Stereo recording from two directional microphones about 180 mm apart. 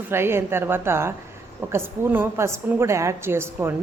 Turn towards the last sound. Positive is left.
turn(degrees=-15)  # may be behind; listen again after turning